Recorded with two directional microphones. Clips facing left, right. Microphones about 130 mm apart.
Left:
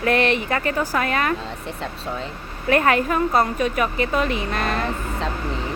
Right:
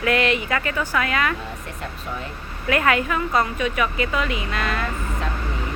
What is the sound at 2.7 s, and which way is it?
Speech, 40° left (ahead or behind).